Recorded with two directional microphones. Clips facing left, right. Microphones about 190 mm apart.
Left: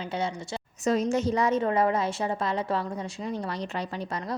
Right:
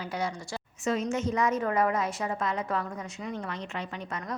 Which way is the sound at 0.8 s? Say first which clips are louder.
Left 4 dB; 35° left (ahead or behind).